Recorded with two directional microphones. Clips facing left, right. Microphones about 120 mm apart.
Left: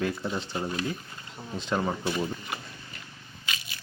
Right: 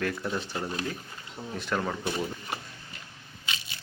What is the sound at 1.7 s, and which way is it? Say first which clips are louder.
Speech: left 2 dB; 15° left (ahead or behind).